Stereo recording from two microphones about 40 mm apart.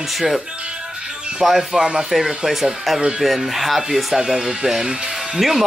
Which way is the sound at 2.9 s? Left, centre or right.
Centre.